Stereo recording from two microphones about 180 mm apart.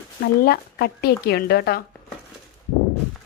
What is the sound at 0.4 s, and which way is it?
Speech, 60° left (ahead or behind).